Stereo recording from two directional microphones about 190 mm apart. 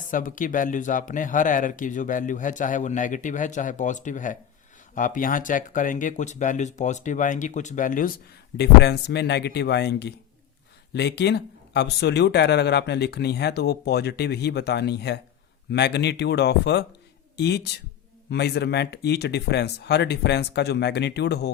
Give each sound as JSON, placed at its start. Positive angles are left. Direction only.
{"t": 0.1, "sound": "speech", "side_deg": 45}
{"t": 8.5, "sound": "speech", "side_deg": 60}